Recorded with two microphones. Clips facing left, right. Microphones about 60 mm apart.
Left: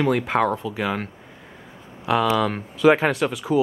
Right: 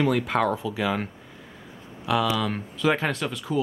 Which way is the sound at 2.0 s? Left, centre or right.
Left.